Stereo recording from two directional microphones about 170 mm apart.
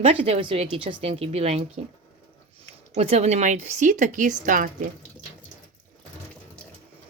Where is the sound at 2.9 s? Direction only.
40° right (ahead or behind).